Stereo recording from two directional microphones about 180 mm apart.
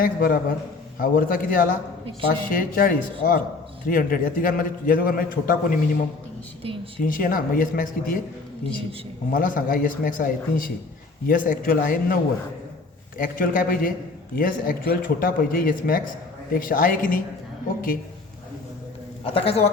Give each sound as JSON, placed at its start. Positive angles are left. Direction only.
{"t": 0.0, "sound": "a man's voice", "side_deg": 55}
{"t": 6.6, "sound": "a woman's voice", "side_deg": -30}
{"t": 7.0, "sound": "a man's voice", "side_deg": 50}
{"t": 9.3, "sound": "a man's voice", "side_deg": 50}
{"t": 19.2, "sound": "a man's voice", "side_deg": 30}